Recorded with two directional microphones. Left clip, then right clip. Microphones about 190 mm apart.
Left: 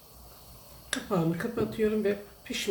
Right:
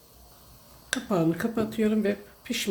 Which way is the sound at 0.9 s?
50° right (ahead or behind).